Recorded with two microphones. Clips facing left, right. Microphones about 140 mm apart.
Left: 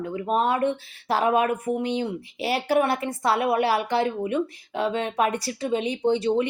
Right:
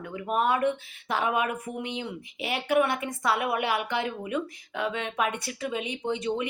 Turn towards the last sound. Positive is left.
turn(degrees=30)  # may be behind; listen again after turning